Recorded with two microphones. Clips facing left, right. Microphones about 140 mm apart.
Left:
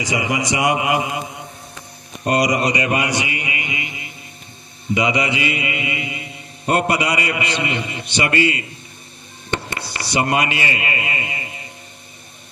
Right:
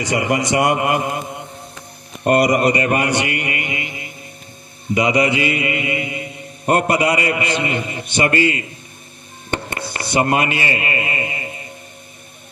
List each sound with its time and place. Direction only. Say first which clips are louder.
0.0 s a man's voice: right 3 dB; 55° right (ahead or behind)